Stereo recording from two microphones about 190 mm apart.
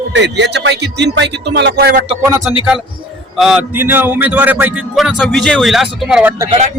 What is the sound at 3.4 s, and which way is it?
Speech, 5° right (ahead or behind).